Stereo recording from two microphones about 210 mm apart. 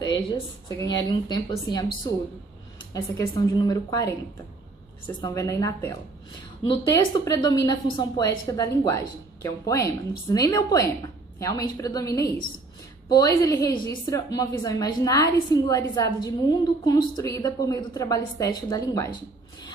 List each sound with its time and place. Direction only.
0.1 s a woman's voice: 20° left (ahead or behind)
2.9 s a woman's voice: 15° left (ahead or behind)